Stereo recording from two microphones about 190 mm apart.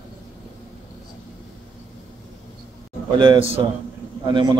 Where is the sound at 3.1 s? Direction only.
25° right (ahead or behind).